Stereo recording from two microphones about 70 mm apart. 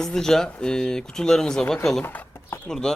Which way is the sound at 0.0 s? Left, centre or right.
Centre.